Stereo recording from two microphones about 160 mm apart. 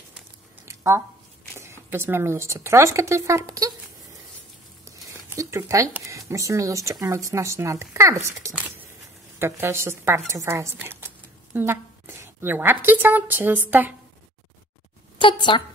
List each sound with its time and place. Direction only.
0.7 s a sound: 20° right (ahead or behind)
1.6 s speech: 15° right (ahead or behind)
4.8 s speech: 20° right (ahead or behind)
15.1 s a woman's voice: 30° left (ahead or behind)